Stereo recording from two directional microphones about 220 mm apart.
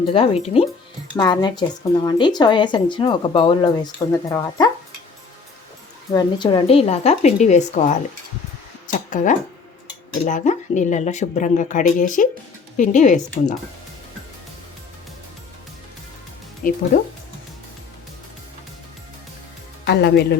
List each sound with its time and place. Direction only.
0.0 s speech: 25° left (ahead or behind)
6.1 s speech: 20° left (ahead or behind)
16.6 s speech: 40° left (ahead or behind)
19.8 s a woman's voice: 50° left (ahead or behind)